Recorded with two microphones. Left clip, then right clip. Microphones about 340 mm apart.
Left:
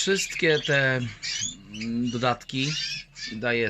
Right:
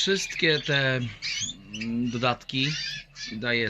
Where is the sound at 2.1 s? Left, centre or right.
Centre.